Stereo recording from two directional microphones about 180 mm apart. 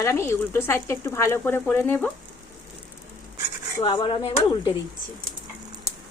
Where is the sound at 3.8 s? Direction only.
30° left (ahead or behind).